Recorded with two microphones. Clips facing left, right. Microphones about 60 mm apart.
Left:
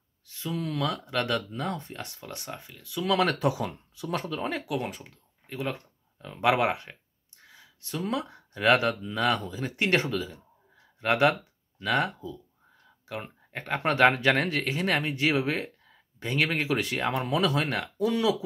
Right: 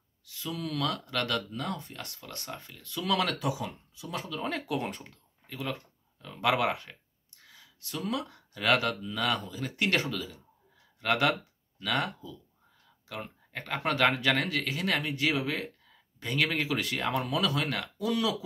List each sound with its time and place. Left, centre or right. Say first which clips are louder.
0.2 s speech: left 3 dB; left; by 3.1 s centre
3.3 s speech: left 5 dB; left
3.6 s speech: left 5 dB; left
4.5 s speech: right 2 dB; centre
5.5 s speech: left 3 dB; left